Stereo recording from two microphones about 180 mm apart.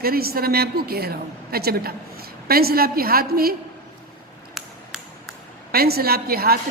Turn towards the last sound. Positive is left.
turn(degrees=-60)  # may be behind; listen again after turning